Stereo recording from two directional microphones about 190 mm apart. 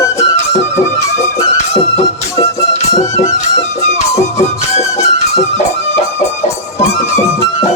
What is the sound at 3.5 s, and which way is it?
Music, 35° left (ahead or behind).